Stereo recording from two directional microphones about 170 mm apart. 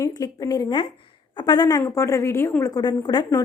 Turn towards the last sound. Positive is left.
turn(degrees=25)  # may be behind; listen again after turning